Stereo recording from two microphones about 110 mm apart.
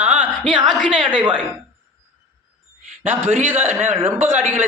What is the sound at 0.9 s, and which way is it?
Speech, 45° right (ahead or behind).